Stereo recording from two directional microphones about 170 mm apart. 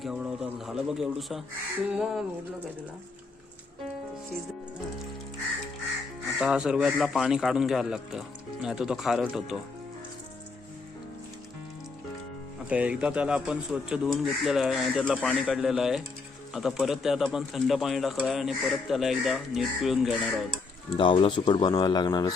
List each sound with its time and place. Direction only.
0.0 s speech: 5° right (ahead or behind)
6.4 s speech: 5° right (ahead or behind)
12.6 s speech: 5° right (ahead or behind)
20.9 s speech: 30° left (ahead or behind)